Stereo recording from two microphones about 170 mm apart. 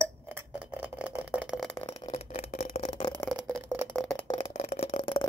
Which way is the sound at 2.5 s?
60° left (ahead or behind).